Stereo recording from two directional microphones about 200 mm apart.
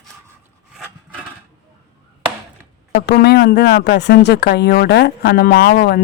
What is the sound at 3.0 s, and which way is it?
Speech, 50° left (ahead or behind).